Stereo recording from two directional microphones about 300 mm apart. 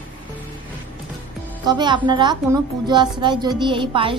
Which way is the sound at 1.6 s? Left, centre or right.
Centre.